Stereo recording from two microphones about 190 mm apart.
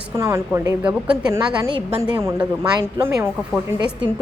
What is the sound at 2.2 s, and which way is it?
A woman's voice, 15° right (ahead or behind).